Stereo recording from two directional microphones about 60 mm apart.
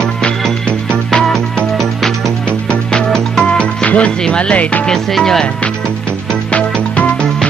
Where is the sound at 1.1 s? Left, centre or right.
Centre.